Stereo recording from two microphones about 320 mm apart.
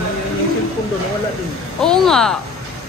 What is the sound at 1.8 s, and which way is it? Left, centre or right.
Speech, centre.